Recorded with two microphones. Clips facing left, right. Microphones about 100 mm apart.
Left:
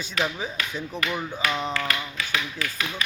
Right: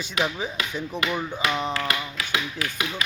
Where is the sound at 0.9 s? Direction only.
15° right (ahead or behind).